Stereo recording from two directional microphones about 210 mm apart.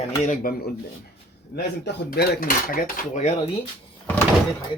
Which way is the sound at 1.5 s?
50° left (ahead or behind).